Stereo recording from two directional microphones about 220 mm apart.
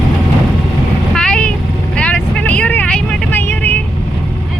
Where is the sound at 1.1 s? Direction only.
5° left (ahead or behind).